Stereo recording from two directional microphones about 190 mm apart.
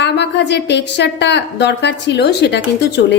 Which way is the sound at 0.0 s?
65° left (ahead or behind).